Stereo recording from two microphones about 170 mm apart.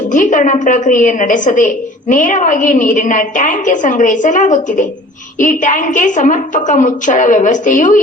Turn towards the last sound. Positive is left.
turn(degrees=50)  # may be behind; listen again after turning